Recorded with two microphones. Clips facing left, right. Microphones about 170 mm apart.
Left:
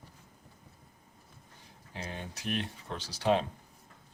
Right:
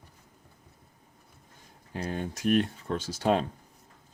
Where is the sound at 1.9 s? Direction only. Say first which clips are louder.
Right 8 dB; 50° right (ahead or behind).